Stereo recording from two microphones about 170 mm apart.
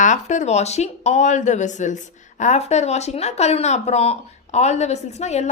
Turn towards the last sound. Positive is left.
turn(degrees=40)  # may be behind; listen again after turning